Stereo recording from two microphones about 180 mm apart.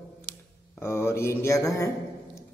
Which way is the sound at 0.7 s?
15° left (ahead or behind).